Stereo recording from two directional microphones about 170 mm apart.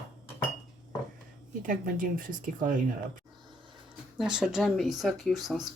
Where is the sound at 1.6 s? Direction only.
55° right (ahead or behind).